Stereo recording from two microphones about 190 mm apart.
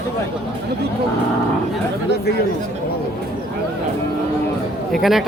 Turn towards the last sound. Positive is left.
turn(degrees=0)  # may be behind; listen again after turning